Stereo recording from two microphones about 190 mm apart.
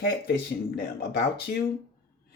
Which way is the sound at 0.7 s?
50° left (ahead or behind).